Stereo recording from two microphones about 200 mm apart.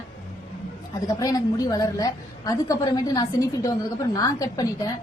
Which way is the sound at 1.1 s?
15° left (ahead or behind).